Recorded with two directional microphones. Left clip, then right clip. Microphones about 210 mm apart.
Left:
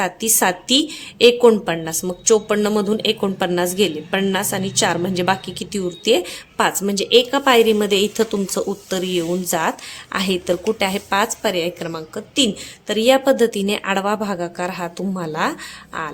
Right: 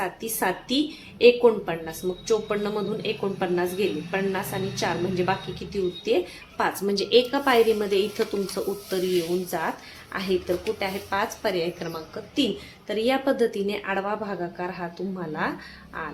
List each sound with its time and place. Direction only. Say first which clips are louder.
0.0 s a woman's voice: left 8 dB; 50° left (ahead or behind)